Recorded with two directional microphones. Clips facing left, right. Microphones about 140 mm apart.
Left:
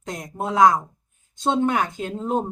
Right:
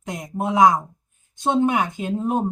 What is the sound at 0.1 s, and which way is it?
Speech, 15° right (ahead or behind).